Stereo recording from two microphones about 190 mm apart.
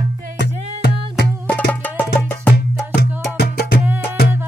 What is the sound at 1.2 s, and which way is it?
Music, 5° left (ahead or behind).